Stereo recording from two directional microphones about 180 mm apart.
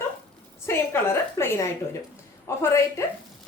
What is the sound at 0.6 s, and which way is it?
Speech, 15° left (ahead or behind).